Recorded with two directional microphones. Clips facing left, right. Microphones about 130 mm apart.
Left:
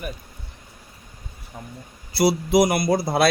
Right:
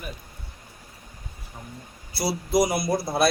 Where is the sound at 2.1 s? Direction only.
75° left (ahead or behind).